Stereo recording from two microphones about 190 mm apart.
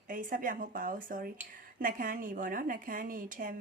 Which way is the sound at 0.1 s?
45° right (ahead or behind).